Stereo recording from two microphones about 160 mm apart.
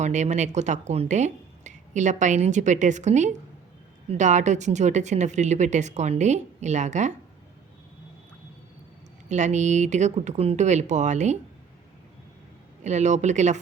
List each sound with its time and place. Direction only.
0.0 s speech: 45° right (ahead or behind)
9.3 s speech: 50° right (ahead or behind)
12.8 s speech: 45° right (ahead or behind)